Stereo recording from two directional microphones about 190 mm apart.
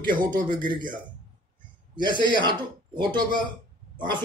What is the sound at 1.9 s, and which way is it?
A man's voice, 25° right (ahead or behind).